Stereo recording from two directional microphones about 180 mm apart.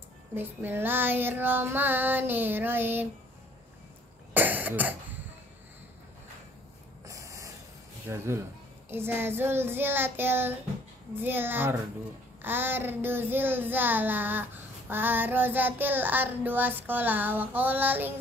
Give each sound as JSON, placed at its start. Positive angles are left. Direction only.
{"t": 0.3, "sound": "child singing", "side_deg": -10}
{"t": 4.3, "sound": "cough", "side_deg": -10}
{"t": 7.1, "sound": "snort", "side_deg": -15}
{"t": 8.1, "sound": "child singing", "side_deg": -15}